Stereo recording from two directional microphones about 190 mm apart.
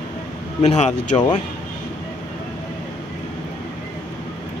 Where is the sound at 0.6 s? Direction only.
35° left (ahead or behind).